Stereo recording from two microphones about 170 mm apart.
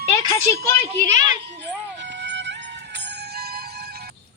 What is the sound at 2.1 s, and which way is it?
Music, 90° right.